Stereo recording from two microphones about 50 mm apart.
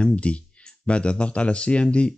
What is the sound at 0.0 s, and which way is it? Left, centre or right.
Speech, left.